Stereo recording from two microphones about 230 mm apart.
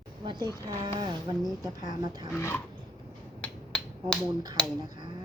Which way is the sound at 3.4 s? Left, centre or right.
Centre.